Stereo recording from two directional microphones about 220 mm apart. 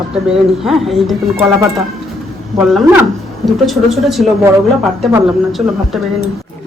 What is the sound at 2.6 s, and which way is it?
Speech, centre (ahead or behind).